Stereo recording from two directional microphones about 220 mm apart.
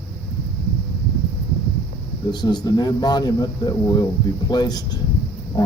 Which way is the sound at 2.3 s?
20° left (ahead or behind).